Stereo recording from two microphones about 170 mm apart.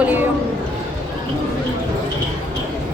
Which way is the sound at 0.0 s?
10° right (ahead or behind).